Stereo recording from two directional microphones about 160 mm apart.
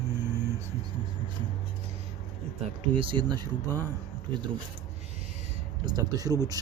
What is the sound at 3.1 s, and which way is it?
Speech, 25° right (ahead or behind).